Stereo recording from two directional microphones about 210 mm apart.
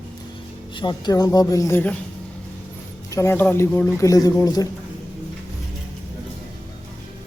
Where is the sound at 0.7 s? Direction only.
20° left (ahead or behind).